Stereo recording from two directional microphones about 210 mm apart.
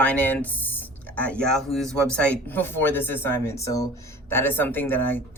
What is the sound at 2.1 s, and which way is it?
Speech, 5° left (ahead or behind).